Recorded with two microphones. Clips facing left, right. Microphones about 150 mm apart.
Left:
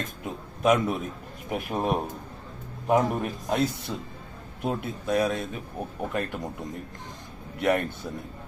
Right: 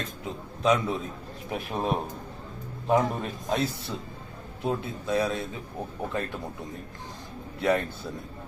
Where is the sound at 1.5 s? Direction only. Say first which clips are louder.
Left 2 dB; 5° left (ahead or behind).